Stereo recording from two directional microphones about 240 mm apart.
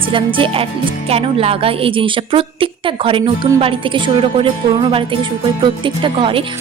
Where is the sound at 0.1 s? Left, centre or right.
Right.